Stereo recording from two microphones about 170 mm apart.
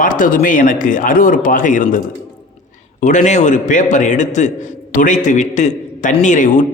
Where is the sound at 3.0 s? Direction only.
50° left (ahead or behind).